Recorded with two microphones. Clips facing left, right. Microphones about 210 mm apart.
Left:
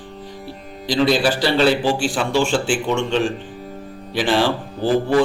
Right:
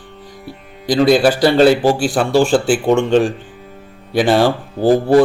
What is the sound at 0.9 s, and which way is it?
A man's voice, 45° right (ahead or behind).